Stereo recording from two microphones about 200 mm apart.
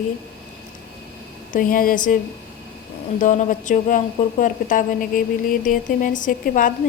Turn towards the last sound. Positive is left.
turn(degrees=40)  # may be behind; listen again after turning